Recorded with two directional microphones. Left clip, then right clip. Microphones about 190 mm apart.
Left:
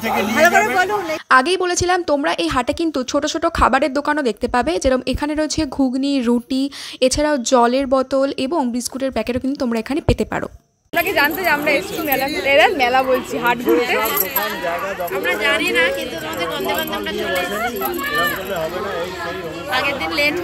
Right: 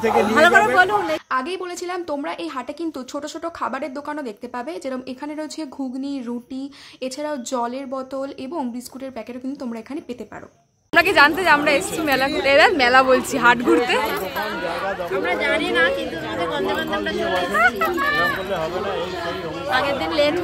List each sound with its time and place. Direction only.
0.0 s speech: 5° right (ahead or behind)
1.3 s a woman's voice: 35° left (ahead or behind)
11.0 s speech: 15° right (ahead or behind)
15.4 s speech: 15° right (ahead or behind)
18.1 s speech: 10° right (ahead or behind)
19.7 s speech: 20° right (ahead or behind)